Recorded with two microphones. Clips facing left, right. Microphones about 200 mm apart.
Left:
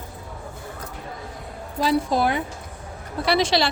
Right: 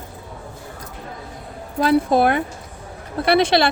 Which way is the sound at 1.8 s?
55° right (ahead or behind).